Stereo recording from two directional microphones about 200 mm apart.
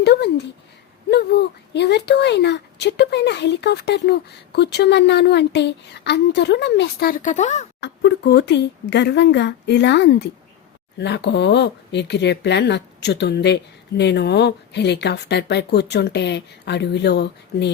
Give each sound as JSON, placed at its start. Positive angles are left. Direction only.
{"t": 0.0, "sound": "a sound", "side_deg": 55}
{"t": 1.1, "sound": "speech", "side_deg": 55}
{"t": 7.8, "sound": "speech", "side_deg": 60}